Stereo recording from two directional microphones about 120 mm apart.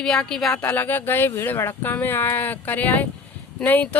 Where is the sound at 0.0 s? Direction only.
5° left (ahead or behind).